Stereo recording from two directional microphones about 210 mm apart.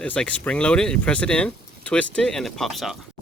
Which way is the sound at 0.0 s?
5° left (ahead or behind).